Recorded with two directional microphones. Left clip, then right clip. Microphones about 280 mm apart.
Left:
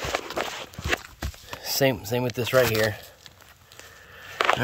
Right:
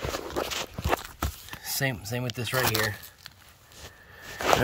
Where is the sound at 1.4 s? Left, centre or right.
Centre.